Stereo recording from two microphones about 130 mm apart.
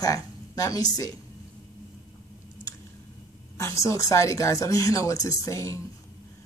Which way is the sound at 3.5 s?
20° left (ahead or behind).